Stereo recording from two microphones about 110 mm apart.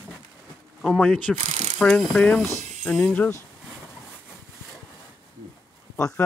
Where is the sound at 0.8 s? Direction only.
5° right (ahead or behind).